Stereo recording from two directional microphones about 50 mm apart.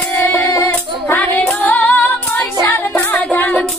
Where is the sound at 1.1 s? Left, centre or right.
Left.